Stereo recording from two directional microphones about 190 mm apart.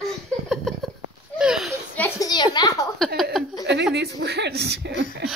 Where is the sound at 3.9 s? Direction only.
60° right (ahead or behind).